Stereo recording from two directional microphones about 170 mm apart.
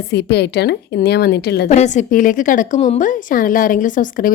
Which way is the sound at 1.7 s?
45° left (ahead or behind).